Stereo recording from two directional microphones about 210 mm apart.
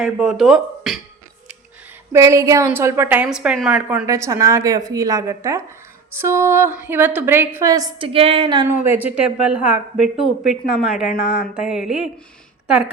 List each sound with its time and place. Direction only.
0.0 s speech: centre (ahead or behind)
2.1 s a woman's voice: 15° right (ahead or behind)
8.6 s a woman's voice: 10° right (ahead or behind)